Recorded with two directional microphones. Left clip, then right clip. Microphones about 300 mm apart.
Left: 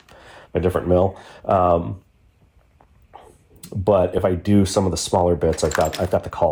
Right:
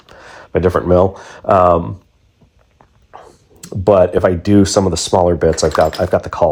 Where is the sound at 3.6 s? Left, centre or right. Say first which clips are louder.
Right 7 dB; right.